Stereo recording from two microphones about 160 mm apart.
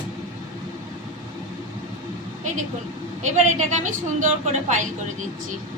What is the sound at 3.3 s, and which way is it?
A woman's voice, 50° right (ahead or behind).